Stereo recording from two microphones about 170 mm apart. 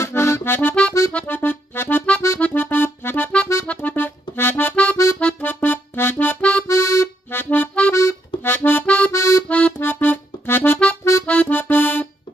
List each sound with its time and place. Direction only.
0.0 s accordion: 15° left (ahead or behind)